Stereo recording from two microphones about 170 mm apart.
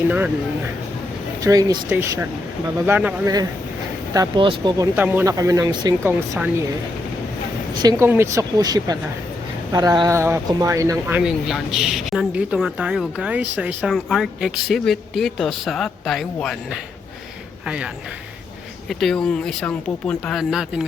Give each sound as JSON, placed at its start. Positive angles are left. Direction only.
{"t": 1.4, "sound": "a woman's voice", "side_deg": -20}
{"t": 4.1, "sound": "a woman's voice", "side_deg": -25}
{"t": 4.9, "sound": "speech", "side_deg": -10}
{"t": 7.8, "sound": "a woman's voice", "side_deg": -20}